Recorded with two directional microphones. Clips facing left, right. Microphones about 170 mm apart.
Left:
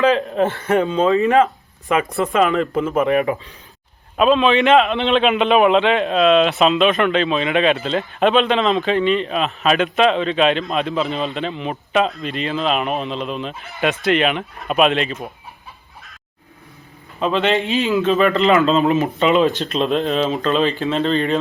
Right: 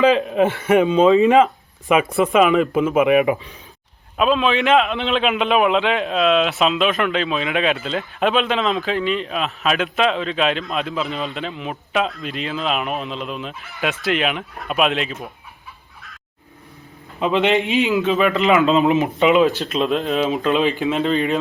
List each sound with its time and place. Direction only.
0.0 s a man's voice: 15° right (ahead or behind)
4.2 s a man's voice: centre (ahead or behind)
17.2 s a man's voice: 15° right (ahead or behind)